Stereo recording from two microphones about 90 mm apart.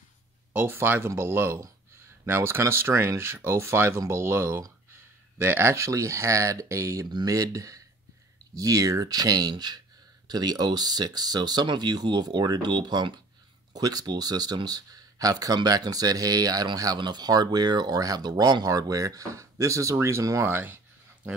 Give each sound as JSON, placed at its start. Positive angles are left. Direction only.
{"t": 0.5, "sound": "speech", "side_deg": -20}
{"t": 7.1, "sound": "speech", "side_deg": -45}